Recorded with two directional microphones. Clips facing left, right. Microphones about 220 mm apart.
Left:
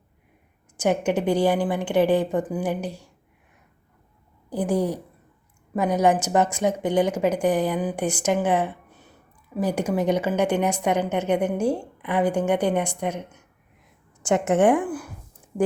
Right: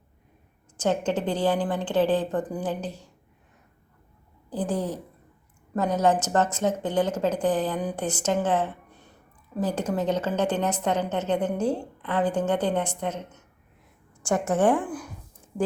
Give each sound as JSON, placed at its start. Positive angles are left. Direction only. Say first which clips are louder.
{"t": 0.8, "sound": "a woman's voice", "louder": "left 3 dB", "side_deg": 10}
{"t": 4.4, "sound": "a woman's voice", "louder": "left 4 dB", "side_deg": 10}